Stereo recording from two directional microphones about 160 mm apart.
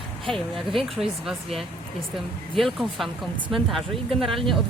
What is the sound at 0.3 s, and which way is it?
Speech, centre (ahead or behind).